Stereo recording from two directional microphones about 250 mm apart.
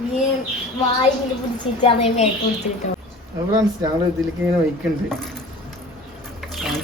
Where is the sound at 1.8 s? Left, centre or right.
Left.